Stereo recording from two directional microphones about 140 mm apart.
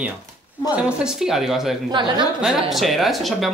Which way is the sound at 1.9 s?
35° right (ahead or behind).